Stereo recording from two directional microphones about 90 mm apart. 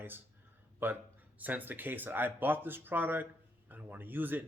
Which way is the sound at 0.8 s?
25° right (ahead or behind).